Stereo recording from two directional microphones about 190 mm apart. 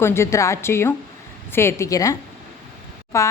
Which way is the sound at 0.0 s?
15° left (ahead or behind).